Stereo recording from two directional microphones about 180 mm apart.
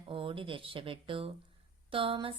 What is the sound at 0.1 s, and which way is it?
A woman's voice, 30° right (ahead or behind).